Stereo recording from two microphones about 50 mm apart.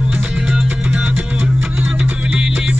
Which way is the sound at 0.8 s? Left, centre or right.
Right.